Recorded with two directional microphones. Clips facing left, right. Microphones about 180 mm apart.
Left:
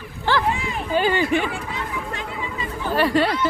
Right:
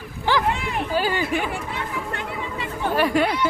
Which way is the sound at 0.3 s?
15° right (ahead or behind).